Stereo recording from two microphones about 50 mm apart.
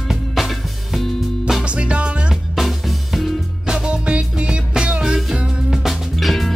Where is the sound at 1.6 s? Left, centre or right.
Right.